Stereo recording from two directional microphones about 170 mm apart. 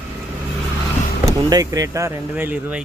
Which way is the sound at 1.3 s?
20° right (ahead or behind).